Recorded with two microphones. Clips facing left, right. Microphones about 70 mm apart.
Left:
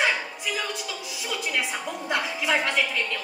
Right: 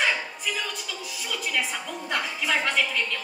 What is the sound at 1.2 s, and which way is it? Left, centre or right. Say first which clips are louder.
A woman's voice: left 1 dB; centre.